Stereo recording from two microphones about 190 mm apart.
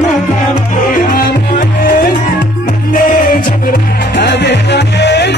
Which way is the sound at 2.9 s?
45° left (ahead or behind).